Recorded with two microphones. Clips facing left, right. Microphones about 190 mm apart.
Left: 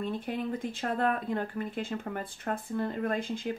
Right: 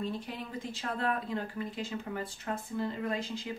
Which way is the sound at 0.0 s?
55° left (ahead or behind).